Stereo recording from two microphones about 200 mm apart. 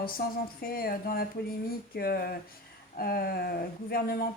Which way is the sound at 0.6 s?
50° left (ahead or behind).